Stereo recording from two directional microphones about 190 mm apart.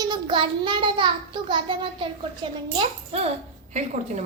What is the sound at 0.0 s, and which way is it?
A child's voice, 25° right (ahead or behind).